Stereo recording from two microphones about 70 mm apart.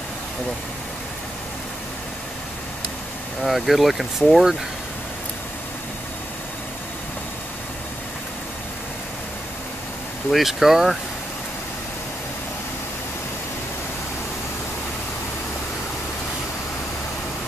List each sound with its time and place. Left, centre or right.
3.4 s speech: centre
10.3 s speech: centre